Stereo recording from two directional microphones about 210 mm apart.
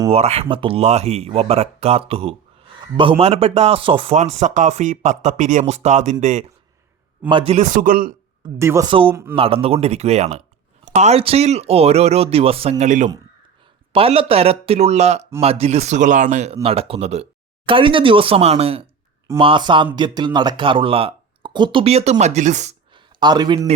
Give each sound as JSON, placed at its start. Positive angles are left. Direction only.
{"t": 0.1, "sound": "a man's voice", "side_deg": -30}
{"t": 8.5, "sound": "speech", "side_deg": -10}
{"t": 8.9, "sound": "a man's voice", "side_deg": -25}
{"t": 22.9, "sound": "a sound", "side_deg": -20}